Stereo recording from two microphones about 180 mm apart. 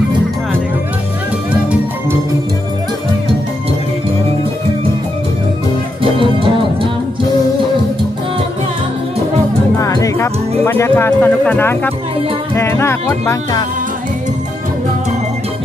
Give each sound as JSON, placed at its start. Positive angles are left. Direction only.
{"t": 1.5, "sound": "music", "side_deg": -5}
{"t": 6.1, "sound": "music", "side_deg": -30}
{"t": 9.8, "sound": "music", "side_deg": 20}
{"t": 10.6, "sound": "speech", "side_deg": 15}